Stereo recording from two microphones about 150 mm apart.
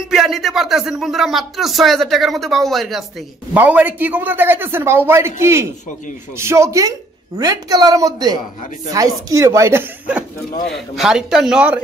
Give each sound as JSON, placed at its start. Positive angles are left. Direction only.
{"t": 0.1, "sound": "speech", "side_deg": 0}
{"t": 3.5, "sound": "a man's voice", "side_deg": -10}